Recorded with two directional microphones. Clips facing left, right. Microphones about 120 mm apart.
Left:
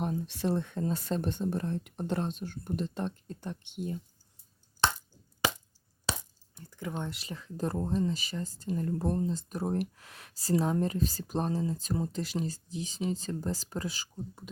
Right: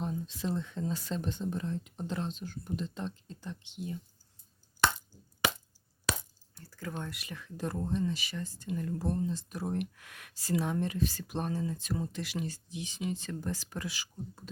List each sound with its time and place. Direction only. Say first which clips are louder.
0.0 s speech: left 4 dB; 65° left (ahead or behind)
6.1 s a sound: right 1 dB; 25° left (ahead or behind)
6.6 s speech: left 3 dB; 20° left (ahead or behind); by 14.1 s 40° left (ahead or behind)
14.4 s speech: even; 10° left (ahead or behind)